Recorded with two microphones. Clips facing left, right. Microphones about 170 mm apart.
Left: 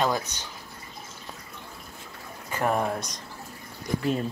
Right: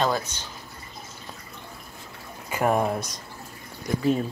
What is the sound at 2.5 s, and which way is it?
Speech, 10° right (ahead or behind).